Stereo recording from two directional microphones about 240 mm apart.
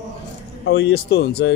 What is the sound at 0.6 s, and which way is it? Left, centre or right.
Speech, left.